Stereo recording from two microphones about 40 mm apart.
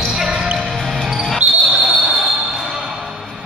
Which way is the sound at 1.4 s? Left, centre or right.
Right.